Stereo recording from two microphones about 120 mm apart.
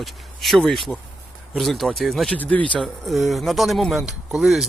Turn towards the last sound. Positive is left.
turn(degrees=-5)  # may be behind; listen again after turning